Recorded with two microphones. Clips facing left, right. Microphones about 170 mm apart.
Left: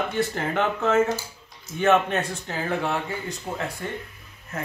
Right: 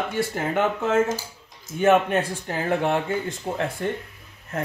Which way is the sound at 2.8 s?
50° right (ahead or behind).